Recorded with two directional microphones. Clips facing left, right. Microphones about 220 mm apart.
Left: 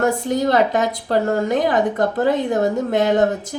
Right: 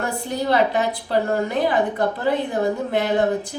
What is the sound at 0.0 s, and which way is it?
A woman's voice, 45° left (ahead or behind).